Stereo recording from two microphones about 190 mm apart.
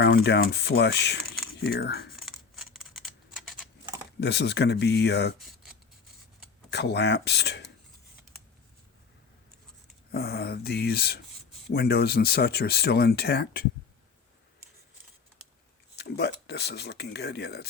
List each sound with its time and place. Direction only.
0.0 s speech: 65° left (ahead or behind)
2.1 s a sound: 5° right (ahead or behind)
4.2 s speech: 65° left (ahead or behind)
6.7 s speech: 65° left (ahead or behind)
10.1 s speech: 55° left (ahead or behind)
16.0 s speech: 60° left (ahead or behind)